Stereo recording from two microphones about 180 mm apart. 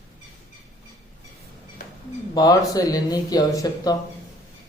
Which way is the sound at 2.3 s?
20° left (ahead or behind).